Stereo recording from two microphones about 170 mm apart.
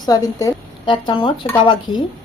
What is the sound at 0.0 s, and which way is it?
A woman's voice, 20° left (ahead or behind).